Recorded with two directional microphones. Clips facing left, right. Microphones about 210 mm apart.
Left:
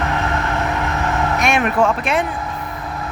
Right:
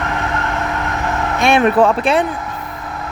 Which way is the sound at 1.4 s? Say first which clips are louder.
Right 7 dB; 30° right (ahead or behind).